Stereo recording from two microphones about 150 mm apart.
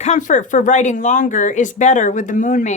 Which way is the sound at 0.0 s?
55° left (ahead or behind).